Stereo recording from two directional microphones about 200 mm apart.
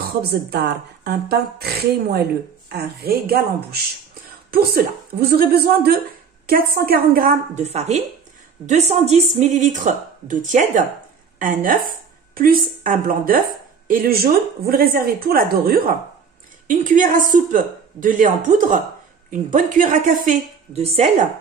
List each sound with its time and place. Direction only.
0.0 s a woman's voice: 55° right (ahead or behind)
7.5 s a woman's voice: 35° right (ahead or behind)